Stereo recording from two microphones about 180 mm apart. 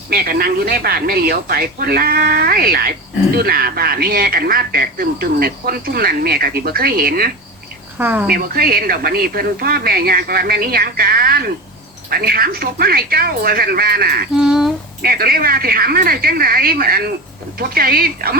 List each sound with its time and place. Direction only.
0.1 s speech: 55° right (ahead or behind)
7.9 s a woman's voice: 10° right (ahead or behind)
8.3 s speech: 55° right (ahead or behind)
14.3 s a sound: 5° right (ahead or behind)
15.0 s speech: 55° right (ahead or behind)